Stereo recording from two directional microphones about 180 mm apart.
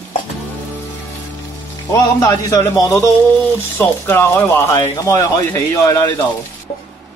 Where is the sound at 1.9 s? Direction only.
20° left (ahead or behind).